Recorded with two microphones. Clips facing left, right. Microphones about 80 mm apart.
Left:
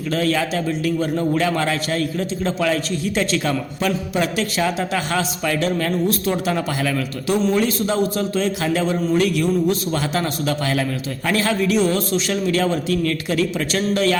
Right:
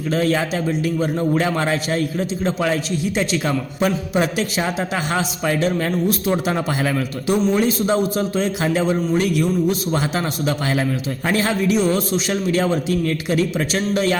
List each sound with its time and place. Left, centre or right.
0.1 s a man's voice: right